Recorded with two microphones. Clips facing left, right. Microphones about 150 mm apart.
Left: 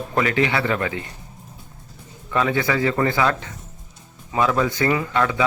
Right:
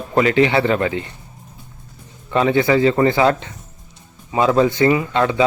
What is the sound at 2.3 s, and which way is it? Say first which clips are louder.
Speech: right 6 dB; 25° right (ahead or behind).